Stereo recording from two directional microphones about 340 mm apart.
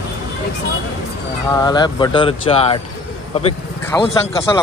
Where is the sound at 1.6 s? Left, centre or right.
Centre.